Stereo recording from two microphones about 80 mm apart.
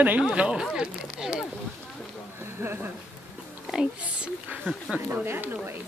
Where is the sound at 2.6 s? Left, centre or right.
Right.